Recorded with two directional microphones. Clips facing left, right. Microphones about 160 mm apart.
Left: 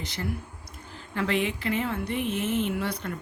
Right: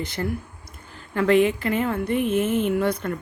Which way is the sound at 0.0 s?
55° right (ahead or behind).